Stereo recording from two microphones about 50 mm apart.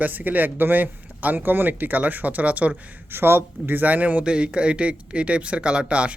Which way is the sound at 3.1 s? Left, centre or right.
Right.